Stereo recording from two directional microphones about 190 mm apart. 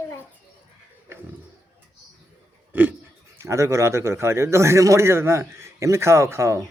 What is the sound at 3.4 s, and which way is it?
A man's voice, 15° right (ahead or behind).